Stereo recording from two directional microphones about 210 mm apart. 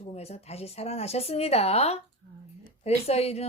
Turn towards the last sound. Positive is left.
turn(degrees=30)  # may be behind; listen again after turning